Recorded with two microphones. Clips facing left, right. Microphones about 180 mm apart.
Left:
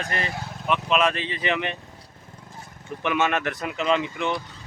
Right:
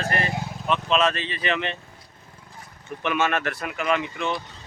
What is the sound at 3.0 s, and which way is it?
Speech, 15° left (ahead or behind).